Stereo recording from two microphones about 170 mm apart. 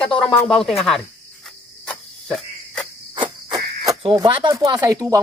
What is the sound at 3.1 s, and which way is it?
Cricket, 25° right (ahead or behind).